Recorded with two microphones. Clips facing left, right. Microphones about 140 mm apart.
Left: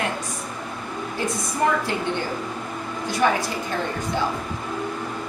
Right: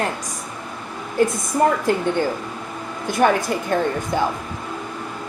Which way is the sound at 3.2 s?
50° right (ahead or behind).